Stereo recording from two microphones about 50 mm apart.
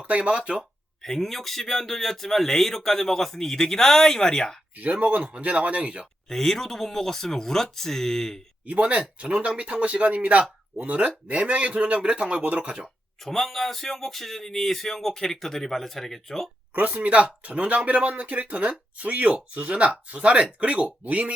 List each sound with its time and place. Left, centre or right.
0.1 s speech: right
1.0 s speech: centre
4.8 s speech: right
6.2 s speech: centre
8.6 s speech: right
13.2 s speech: centre
16.7 s speech: right